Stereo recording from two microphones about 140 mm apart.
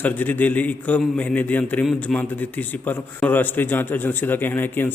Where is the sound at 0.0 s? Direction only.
10° left (ahead or behind).